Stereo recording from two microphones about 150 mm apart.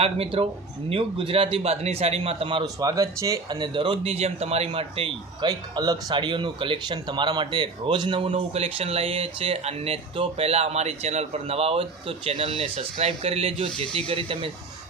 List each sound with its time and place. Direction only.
0.0 s speech: 40° right (ahead or behind)
2.7 s speech: 20° right (ahead or behind); by 5.5 s 40° right (ahead or behind)
5.5 s speech: 25° right (ahead or behind)
8.3 s speech: 45° right (ahead or behind)